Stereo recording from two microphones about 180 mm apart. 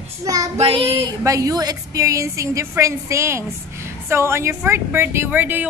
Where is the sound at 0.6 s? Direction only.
30° right (ahead or behind).